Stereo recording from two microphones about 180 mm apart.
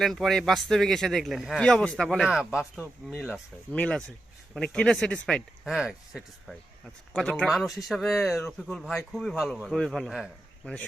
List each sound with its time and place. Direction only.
0.0 s speech: centre (ahead or behind)